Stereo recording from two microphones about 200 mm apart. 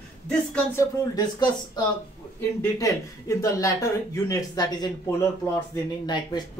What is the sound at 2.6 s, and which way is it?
A man's voice, 15° left (ahead or behind).